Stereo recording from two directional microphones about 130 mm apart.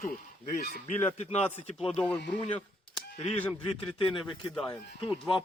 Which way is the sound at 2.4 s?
45° left (ahead or behind).